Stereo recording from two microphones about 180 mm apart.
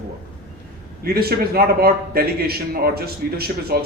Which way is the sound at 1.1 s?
60° right (ahead or behind).